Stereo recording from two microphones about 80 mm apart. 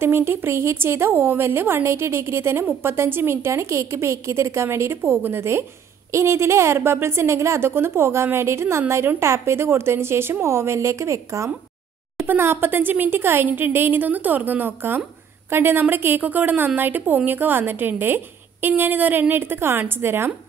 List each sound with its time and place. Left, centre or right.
0.0 s speech: right
12.3 s a woman's voice: right